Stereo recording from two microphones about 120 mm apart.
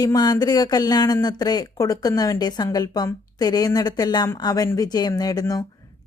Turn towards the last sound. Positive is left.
turn(degrees=30)  # may be behind; listen again after turning